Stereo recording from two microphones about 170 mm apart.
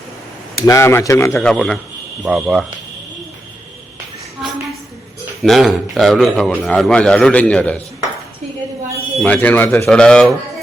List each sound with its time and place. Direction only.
0.6 s speech: 15° left (ahead or behind)
1.4 s speech: 5° left (ahead or behind)
5.4 s speech: centre (ahead or behind)
9.2 s speech: 10° left (ahead or behind)